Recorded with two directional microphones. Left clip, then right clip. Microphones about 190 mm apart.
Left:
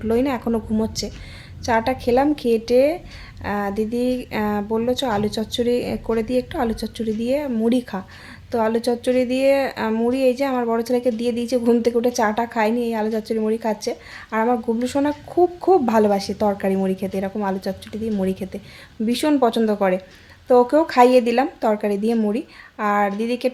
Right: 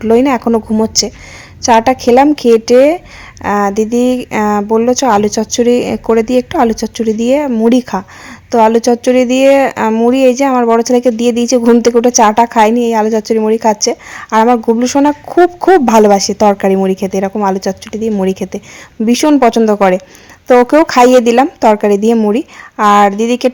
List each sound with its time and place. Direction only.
0.0 s speech: 35° right (ahead or behind)